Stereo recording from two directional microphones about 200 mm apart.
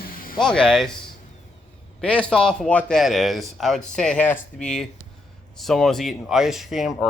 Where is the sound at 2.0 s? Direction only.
5° left (ahead or behind).